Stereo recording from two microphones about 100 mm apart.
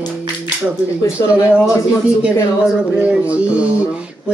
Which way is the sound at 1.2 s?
35° left (ahead or behind).